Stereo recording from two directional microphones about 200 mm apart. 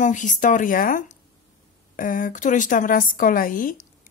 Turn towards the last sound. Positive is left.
turn(degrees=45)  # may be behind; listen again after turning